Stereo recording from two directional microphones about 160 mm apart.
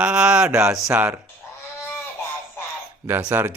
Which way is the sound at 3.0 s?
15° right (ahead or behind).